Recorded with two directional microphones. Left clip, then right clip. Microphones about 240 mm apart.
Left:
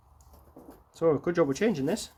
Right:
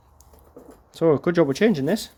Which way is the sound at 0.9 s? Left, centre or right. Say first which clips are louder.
Right 6 dB; right.